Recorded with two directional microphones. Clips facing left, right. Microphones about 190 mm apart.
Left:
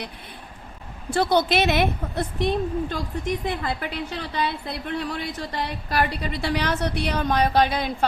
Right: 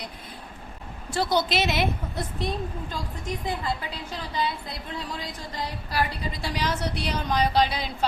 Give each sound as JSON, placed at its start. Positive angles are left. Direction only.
{"t": 1.1, "sound": "a woman's voice", "side_deg": 55}